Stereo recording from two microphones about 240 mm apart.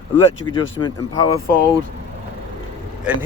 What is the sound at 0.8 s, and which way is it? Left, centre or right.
Speech, centre.